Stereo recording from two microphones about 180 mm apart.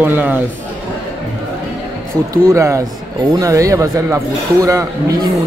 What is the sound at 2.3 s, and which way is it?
Speech, 15° right (ahead or behind).